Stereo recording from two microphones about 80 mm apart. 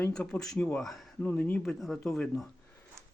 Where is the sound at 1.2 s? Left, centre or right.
Left.